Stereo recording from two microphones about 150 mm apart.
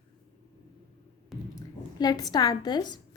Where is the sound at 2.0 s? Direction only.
25° left (ahead or behind).